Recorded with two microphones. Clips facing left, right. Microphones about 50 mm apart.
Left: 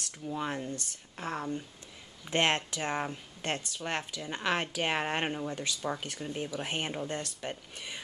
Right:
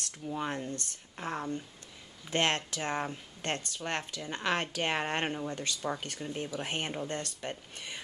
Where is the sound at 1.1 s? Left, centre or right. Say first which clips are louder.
Even; centre.